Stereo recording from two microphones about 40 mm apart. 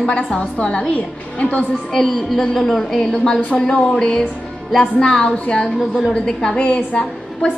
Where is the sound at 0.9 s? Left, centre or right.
Left.